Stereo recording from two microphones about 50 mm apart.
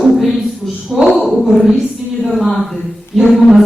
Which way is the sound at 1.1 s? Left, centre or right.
Centre.